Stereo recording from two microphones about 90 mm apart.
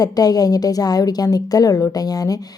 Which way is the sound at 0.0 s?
45° left (ahead or behind).